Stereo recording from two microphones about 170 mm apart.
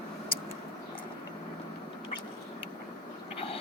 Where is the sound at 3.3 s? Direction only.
35° left (ahead or behind).